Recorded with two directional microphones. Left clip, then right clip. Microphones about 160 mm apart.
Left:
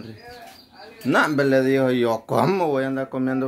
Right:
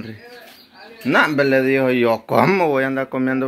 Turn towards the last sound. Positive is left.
turn(degrees=0)  # may be behind; listen again after turning